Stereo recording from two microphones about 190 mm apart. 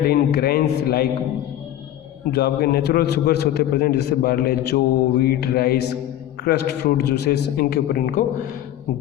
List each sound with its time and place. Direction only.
0.0 s a man's voice: 55° left (ahead or behind)
2.3 s a man's voice: 55° left (ahead or behind)